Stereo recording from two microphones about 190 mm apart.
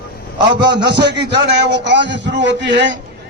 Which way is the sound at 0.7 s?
65° right (ahead or behind).